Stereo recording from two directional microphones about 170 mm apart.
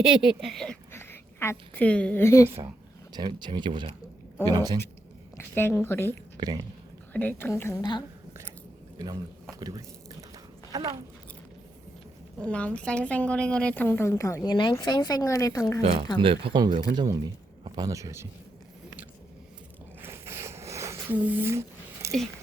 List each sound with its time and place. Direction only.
0.3 s speech: centre (ahead or behind)
0.9 s a woman's voice: 15° left (ahead or behind)
2.5 s speech: 15° right (ahead or behind)
3.1 s speech: 25° right (ahead or behind)
5.4 s a woman's voice: 15° left (ahead or behind)
6.4 s speech: 20° right (ahead or behind)
7.1 s a woman's voice: 10° left (ahead or behind)
9.0 s a sound: 20° right (ahead or behind)
12.4 s a woman's voice: 5° left (ahead or behind)
15.8 s speech: 40° right (ahead or behind); by 18.3 s 15° right (ahead or behind)
20.0 s a sound: 15° right (ahead or behind)